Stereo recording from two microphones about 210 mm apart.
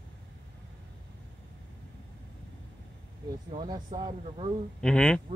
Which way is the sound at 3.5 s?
20° right (ahead or behind).